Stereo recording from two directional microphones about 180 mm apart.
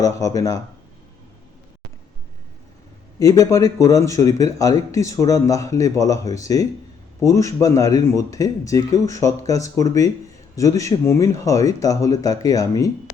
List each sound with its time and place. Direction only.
0.0 s speech: 20° left (ahead or behind)
3.2 s speech: 20° left (ahead or behind)